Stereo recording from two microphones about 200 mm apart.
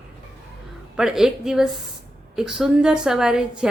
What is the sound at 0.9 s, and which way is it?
A woman's voice, centre (ahead or behind).